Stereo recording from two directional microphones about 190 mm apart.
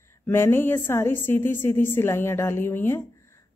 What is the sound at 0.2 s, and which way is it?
A woman's voice, 10° left (ahead or behind).